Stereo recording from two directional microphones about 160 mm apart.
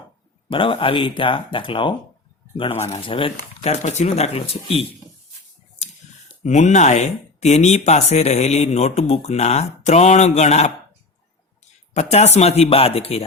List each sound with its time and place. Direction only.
0.5 s speech: 35° left (ahead or behind)
6.4 s speech: 45° left (ahead or behind)
11.9 s speech: 45° left (ahead or behind)